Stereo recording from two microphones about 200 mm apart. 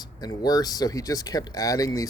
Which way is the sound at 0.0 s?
20° left (ahead or behind).